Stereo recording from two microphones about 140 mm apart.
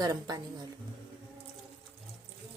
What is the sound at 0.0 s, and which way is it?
Speech, 25° right (ahead or behind).